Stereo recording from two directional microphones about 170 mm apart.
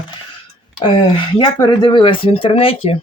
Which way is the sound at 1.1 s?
30° left (ahead or behind).